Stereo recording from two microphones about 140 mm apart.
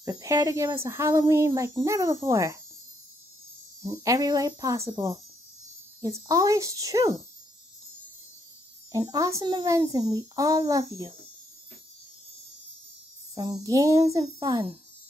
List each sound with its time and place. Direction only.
0.0 s a child's voice: 25° right (ahead or behind)
3.8 s a child's voice: 25° right (ahead or behind)
8.9 s a child's voice: 25° right (ahead or behind)
13.3 s a child's voice: 30° right (ahead or behind)